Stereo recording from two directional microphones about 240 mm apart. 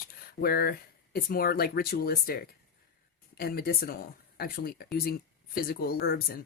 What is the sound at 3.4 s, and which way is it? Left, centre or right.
Speech, left.